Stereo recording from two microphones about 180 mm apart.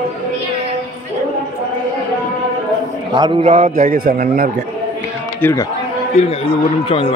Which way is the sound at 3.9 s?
55° right (ahead or behind).